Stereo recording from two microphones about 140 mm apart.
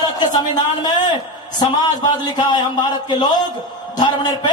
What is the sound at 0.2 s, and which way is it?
A man's voice, 30° left (ahead or behind).